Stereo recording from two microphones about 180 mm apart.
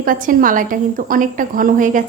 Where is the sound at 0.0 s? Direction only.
50° right (ahead or behind).